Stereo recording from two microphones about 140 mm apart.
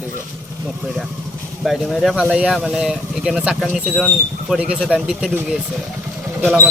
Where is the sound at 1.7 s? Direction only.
Centre (ahead or behind).